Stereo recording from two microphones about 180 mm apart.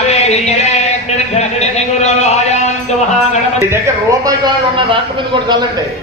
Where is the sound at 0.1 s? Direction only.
35° left (ahead or behind).